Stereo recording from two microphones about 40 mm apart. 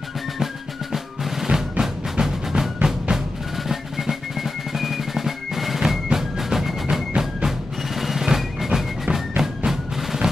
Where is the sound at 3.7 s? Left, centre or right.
Centre.